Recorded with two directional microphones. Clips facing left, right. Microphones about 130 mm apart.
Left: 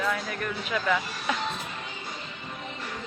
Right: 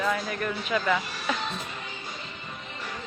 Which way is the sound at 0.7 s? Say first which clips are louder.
Right 2 dB; centre (ahead or behind).